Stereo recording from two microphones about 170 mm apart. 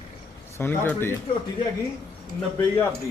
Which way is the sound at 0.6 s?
15° left (ahead or behind).